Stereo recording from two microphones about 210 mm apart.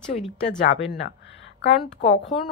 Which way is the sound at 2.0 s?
30° left (ahead or behind).